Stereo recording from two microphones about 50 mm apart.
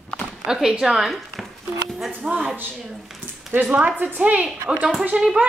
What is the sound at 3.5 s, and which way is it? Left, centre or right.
A woman's voice, right.